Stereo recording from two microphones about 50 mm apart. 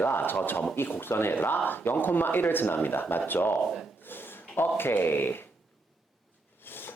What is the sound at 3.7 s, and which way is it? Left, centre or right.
Speech, centre.